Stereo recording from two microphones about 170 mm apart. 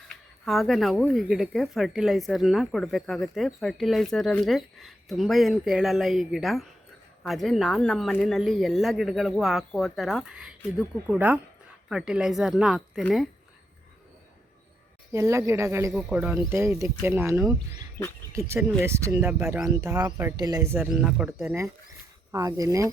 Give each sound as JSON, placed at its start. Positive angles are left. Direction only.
{"t": 0.4, "sound": "speech", "side_deg": 0}
{"t": 15.1, "sound": "speech", "side_deg": -15}
{"t": 15.9, "sound": "speech", "side_deg": 0}
{"t": 16.1, "sound": "speech", "side_deg": -15}
{"t": 21.4, "sound": "speech", "side_deg": -15}